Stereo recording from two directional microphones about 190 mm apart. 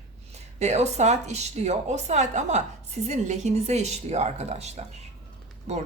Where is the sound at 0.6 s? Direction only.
35° right (ahead or behind).